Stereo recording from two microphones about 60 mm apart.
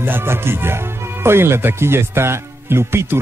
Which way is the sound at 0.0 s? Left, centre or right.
Right.